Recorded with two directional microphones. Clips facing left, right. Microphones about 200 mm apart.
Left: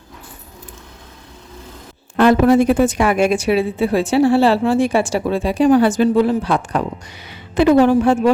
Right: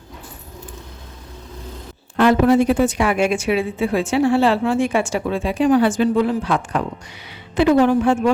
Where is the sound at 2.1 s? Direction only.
45° left (ahead or behind).